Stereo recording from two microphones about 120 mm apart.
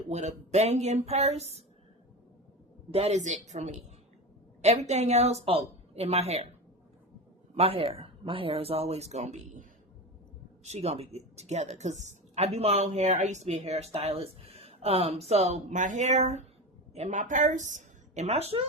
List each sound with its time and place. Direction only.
0.1 s a woman's voice: 70° right (ahead or behind)
2.9 s speech: 60° right (ahead or behind)
3.2 s a woman's voice: 75° right (ahead or behind)
7.5 s speech: 55° right (ahead or behind); by 9.6 s 80° right
10.6 s a woman's voice: 65° right (ahead or behind)